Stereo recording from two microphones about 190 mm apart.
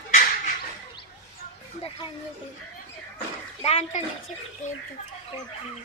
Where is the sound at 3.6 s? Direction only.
35° left (ahead or behind).